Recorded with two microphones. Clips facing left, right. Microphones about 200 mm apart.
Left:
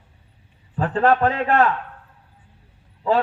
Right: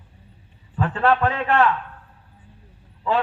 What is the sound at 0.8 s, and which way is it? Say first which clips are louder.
Speech: left 2 dB; 40° left (ahead or behind).